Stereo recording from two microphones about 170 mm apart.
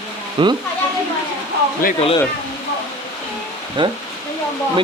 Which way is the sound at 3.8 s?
30° right (ahead or behind).